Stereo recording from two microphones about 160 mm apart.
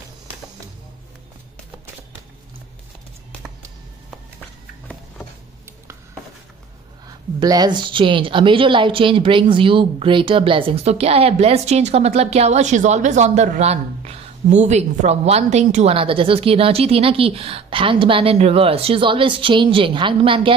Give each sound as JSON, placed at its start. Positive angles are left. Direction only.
{"t": 7.3, "sound": "a woman's voice", "side_deg": -25}